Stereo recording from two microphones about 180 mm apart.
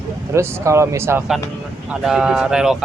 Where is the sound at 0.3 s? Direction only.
15° right (ahead or behind).